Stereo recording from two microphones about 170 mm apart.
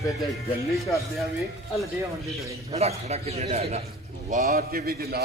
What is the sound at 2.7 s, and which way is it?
A man's voice, 40° right (ahead or behind).